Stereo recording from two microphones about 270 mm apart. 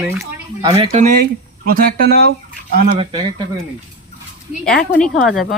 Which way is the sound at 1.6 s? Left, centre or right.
Right.